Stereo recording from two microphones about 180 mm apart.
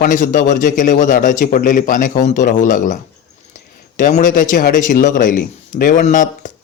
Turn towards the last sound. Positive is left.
turn(degrees=45)  # may be behind; listen again after turning